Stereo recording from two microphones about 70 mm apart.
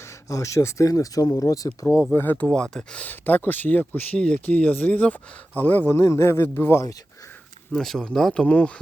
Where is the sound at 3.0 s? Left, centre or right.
Left.